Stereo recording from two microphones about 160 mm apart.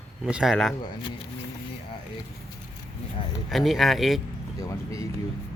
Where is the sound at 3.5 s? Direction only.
Centre (ahead or behind).